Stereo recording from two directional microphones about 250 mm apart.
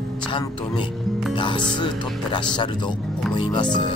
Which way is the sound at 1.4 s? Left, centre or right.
Centre.